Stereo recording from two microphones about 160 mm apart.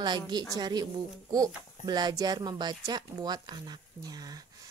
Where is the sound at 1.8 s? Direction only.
25° right (ahead or behind).